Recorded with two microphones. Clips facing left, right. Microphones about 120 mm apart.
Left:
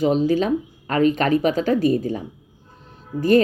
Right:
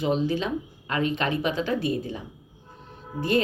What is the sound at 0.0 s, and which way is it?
A woman's voice, 40° left (ahead or behind).